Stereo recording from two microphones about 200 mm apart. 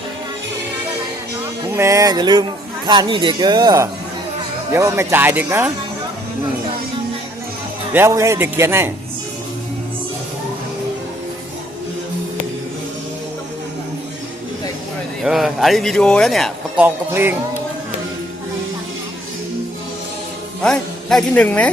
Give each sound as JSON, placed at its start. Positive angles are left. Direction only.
{"t": 1.7, "sound": "speech", "side_deg": -15}
{"t": 7.9, "sound": "speech", "side_deg": -15}
{"t": 15.2, "sound": "speech", "side_deg": 0}
{"t": 20.6, "sound": "a woman's voice", "side_deg": 5}